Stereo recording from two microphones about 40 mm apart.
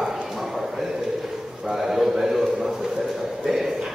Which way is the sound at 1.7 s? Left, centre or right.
Centre.